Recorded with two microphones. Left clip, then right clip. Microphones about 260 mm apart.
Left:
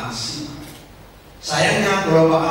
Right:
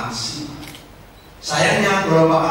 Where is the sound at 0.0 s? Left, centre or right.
Centre.